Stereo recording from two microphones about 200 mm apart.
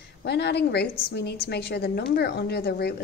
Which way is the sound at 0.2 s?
55° left (ahead or behind).